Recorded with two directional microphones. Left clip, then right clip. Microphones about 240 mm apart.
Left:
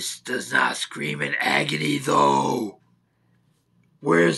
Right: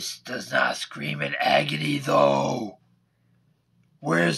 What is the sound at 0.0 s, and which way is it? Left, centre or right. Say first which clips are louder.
Speech: left 4 dB; right.